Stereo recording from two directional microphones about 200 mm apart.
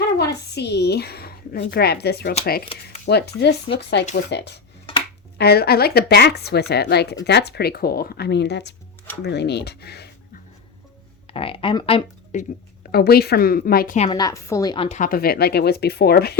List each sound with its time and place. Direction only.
0.2 s a sound: 55° left (ahead or behind)
2.4 s speech: 50° left (ahead or behind)
11.3 s speech: 25° left (ahead or behind)
12.9 s speech: 50° left (ahead or behind)
14.1 s a woman's voice: 20° left (ahead or behind)
14.8 s speech: 40° left (ahead or behind)